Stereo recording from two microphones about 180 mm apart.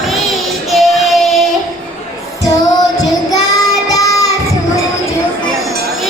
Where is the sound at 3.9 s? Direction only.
20° left (ahead or behind).